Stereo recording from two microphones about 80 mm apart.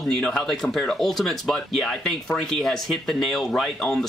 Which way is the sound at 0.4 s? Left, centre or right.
Centre.